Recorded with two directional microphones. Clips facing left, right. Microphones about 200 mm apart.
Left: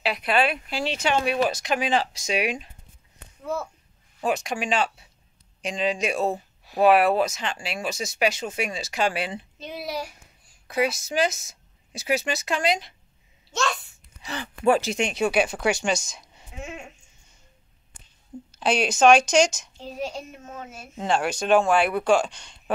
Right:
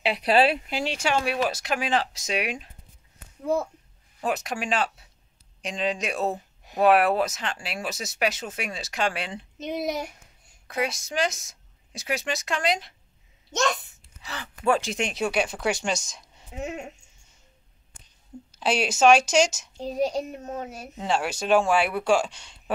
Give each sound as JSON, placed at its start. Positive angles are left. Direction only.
{"t": 0.0, "sound": "speech", "side_deg": -30}
{"t": 0.7, "sound": "a woman's voice", "side_deg": -15}
{"t": 4.2, "sound": "a woman's voice", "side_deg": 0}
{"t": 9.6, "sound": "speech", "side_deg": -20}
{"t": 10.7, "sound": "a woman's voice", "side_deg": 5}
{"t": 13.5, "sound": "a child's voice", "side_deg": -20}
{"t": 14.2, "sound": "speech", "side_deg": 15}
{"t": 14.8, "sound": "a woman's voice", "side_deg": 0}
{"t": 16.5, "sound": "speech", "side_deg": -40}
{"t": 18.5, "sound": "a woman's voice", "side_deg": -5}
{"t": 20.1, "sound": "speech", "side_deg": -35}
{"t": 20.9, "sound": "a woman's voice", "side_deg": 0}